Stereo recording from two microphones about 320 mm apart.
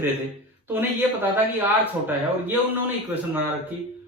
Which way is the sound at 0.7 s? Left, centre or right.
Centre.